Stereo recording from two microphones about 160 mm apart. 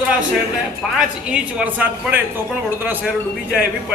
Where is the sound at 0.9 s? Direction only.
5° right (ahead or behind).